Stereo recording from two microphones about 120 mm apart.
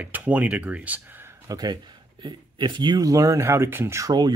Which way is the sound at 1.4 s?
35° right (ahead or behind).